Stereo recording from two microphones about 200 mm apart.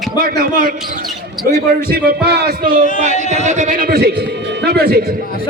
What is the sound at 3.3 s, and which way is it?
A man's voice, 35° right (ahead or behind).